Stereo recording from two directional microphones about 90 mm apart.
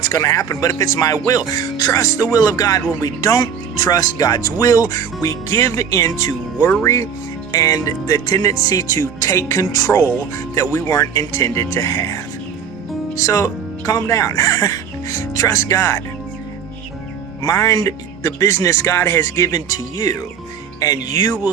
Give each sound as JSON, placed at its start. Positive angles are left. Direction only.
{"t": 0.0, "sound": "speech", "side_deg": 40}
{"t": 17.4, "sound": "speech", "side_deg": 40}